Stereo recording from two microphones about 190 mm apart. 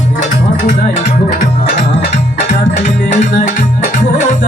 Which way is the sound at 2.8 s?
40° left (ahead or behind).